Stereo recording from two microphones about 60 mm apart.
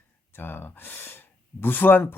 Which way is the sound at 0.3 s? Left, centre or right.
Left.